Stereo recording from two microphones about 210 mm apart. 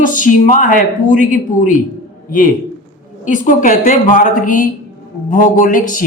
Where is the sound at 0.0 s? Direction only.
40° left (ahead or behind).